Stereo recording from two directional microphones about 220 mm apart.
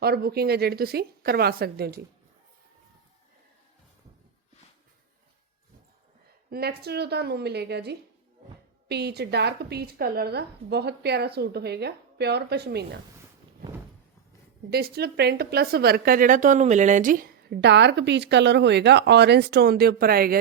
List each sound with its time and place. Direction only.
0.0 s a woman's voice: 45° right (ahead or behind)
6.5 s a woman's voice: 45° right (ahead or behind)
14.7 s a woman's voice: 45° right (ahead or behind)